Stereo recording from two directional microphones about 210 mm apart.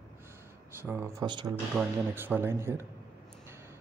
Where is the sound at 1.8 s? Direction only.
10° right (ahead or behind).